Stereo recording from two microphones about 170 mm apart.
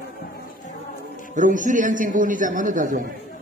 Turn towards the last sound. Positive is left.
turn(degrees=-50)  # may be behind; listen again after turning